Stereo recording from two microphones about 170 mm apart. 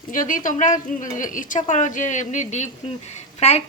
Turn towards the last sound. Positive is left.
turn(degrees=40)  # may be behind; listen again after turning